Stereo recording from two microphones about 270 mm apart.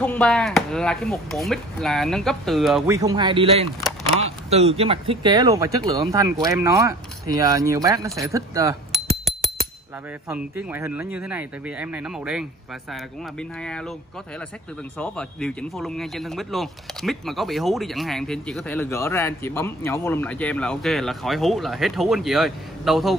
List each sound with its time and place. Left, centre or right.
0.0 s a man's voice: centre
2.9 s speech: centre
10.2 s a man's voice: centre
15.0 s a man's voice: centre